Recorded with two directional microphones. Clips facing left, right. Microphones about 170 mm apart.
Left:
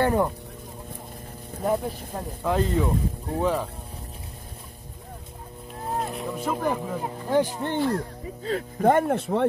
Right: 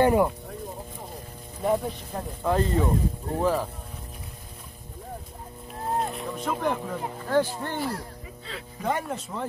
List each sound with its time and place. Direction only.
0.0 s speech: 10° right (ahead or behind)
1.6 s speech: centre (ahead or behind)
5.9 s speech: 5° left (ahead or behind); by 7.8 s 20° left (ahead or behind)
8.5 s speech: 50° left (ahead or behind); by 9.5 s 65° left (ahead or behind)